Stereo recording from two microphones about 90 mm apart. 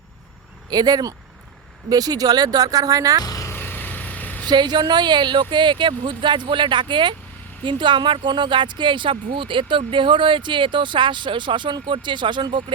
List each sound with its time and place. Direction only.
0.7 s speech: 50° right (ahead or behind)
3.2 s vehicle: 40° left (ahead or behind)
3.5 s vehicle: 25° left (ahead or behind)
4.4 s speech: 55° right (ahead or behind)